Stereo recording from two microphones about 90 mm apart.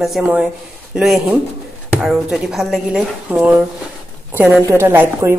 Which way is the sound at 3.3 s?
20° right (ahead or behind).